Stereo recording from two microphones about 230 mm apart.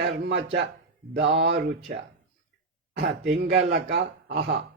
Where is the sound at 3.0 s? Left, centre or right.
Right.